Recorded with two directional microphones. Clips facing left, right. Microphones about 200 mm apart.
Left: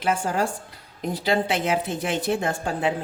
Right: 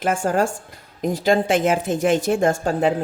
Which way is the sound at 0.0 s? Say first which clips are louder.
Right 4 dB; 50° right (ahead or behind).